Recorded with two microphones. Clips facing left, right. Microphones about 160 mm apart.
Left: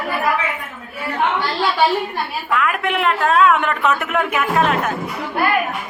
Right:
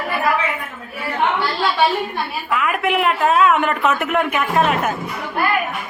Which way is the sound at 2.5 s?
5° right (ahead or behind).